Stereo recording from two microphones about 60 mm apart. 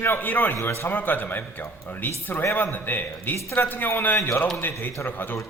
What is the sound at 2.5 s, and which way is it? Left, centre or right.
Speech, left.